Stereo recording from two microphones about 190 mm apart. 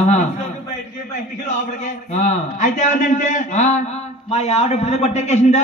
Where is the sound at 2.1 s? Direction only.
40° left (ahead or behind).